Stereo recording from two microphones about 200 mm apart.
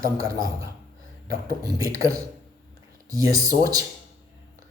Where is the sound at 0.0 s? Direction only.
20° right (ahead or behind).